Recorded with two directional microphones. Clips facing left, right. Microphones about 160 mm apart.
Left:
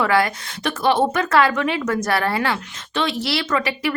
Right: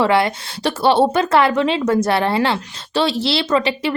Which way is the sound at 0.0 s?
25° right (ahead or behind).